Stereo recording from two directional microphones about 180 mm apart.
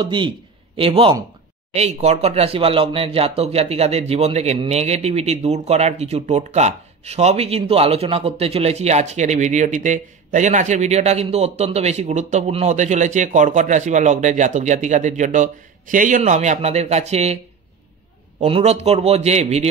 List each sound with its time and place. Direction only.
0.0 s a man's voice: 25° right (ahead or behind)
18.4 s speech: 35° right (ahead or behind)